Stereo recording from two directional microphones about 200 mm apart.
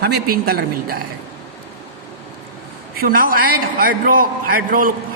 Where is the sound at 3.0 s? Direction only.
45° right (ahead or behind).